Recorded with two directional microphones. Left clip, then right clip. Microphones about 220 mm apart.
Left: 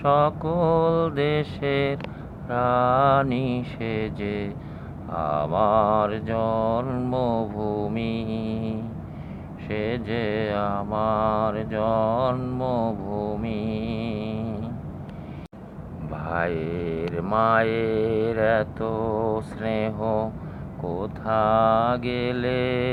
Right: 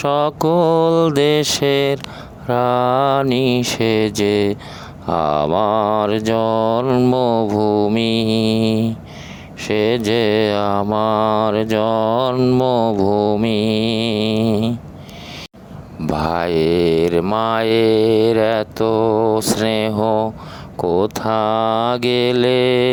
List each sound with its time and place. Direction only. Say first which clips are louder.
0.0 s speech: right 4 dB; 55° right (ahead or behind)
16.1 s speech: right 9 dB; 60° right (ahead or behind)